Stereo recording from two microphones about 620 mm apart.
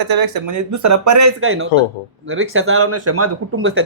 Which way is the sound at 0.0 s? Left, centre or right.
Right.